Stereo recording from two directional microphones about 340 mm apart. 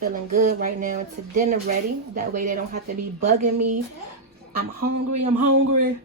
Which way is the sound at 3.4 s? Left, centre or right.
Right.